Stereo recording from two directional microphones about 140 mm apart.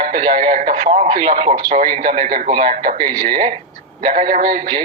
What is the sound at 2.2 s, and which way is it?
Speech, 80° right.